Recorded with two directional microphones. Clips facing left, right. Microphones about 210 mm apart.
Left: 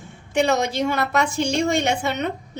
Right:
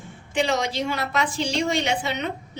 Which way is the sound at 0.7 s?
50° left (ahead or behind).